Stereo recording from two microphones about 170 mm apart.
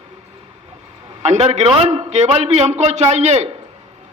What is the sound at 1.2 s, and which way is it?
A man's voice, 40° right (ahead or behind).